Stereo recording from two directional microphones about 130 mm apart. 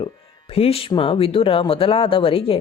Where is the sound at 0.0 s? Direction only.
50° left (ahead or behind).